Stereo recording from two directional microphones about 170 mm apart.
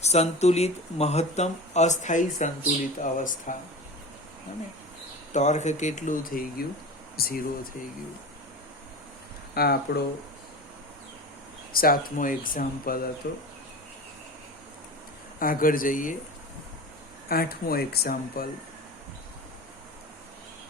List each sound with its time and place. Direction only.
0.0 s speech: 40° left (ahead or behind)
5.3 s speech: 45° left (ahead or behind); by 7.7 s 60° left (ahead or behind)
9.6 s speech: 70° left (ahead or behind)
11.7 s speech: 60° left (ahead or behind)
15.4 s speech: 55° left (ahead or behind)
17.2 s speech: 60° left (ahead or behind)